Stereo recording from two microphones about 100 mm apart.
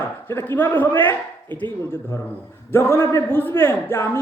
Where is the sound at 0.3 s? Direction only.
20° left (ahead or behind).